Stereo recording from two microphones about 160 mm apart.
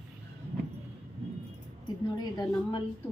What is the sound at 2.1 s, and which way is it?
Speech, 25° left (ahead or behind).